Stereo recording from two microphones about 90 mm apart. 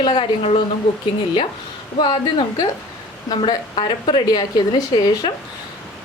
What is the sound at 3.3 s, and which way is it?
A woman's voice, 50° left (ahead or behind).